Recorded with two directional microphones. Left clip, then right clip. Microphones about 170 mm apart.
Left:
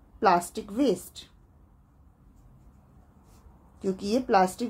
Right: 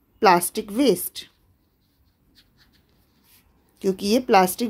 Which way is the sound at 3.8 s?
30° right (ahead or behind).